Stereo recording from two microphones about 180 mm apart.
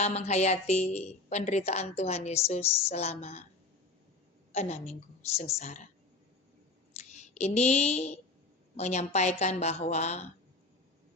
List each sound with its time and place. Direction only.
0.0 s a woman's voice: 35° left (ahead or behind)
4.5 s a woman's voice: 35° left (ahead or behind)
6.9 s a woman's voice: 40° left (ahead or behind)